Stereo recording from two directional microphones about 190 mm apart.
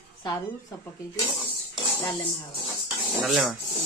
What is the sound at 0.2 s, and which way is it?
Speech, 20° left (ahead or behind).